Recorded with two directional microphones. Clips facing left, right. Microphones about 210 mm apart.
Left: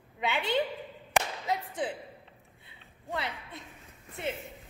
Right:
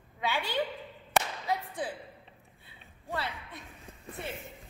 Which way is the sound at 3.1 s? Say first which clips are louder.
Left 1 dB; 20° left (ahead or behind).